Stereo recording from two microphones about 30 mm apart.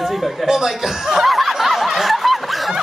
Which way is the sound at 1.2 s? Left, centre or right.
Centre.